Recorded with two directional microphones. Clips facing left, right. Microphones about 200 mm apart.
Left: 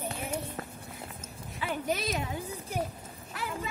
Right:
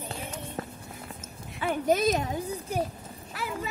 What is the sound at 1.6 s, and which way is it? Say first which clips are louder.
Speech: right 8 dB; 45° right (ahead or behind).